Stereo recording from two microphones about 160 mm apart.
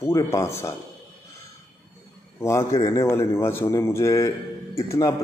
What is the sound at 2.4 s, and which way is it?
A man's voice, 20° left (ahead or behind).